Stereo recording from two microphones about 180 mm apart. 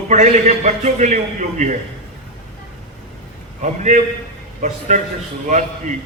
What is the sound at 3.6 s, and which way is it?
A man's voice, 45° right (ahead or behind).